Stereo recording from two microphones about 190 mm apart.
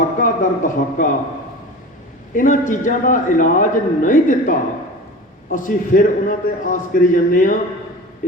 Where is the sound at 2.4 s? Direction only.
45° left (ahead or behind).